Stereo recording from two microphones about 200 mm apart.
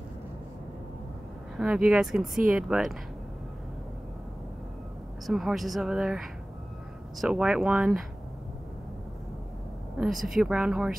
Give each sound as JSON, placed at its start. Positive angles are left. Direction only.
{"t": 1.6, "sound": "speech", "side_deg": -5}
{"t": 5.2, "sound": "speech", "side_deg": 0}
{"t": 9.9, "sound": "speech", "side_deg": 0}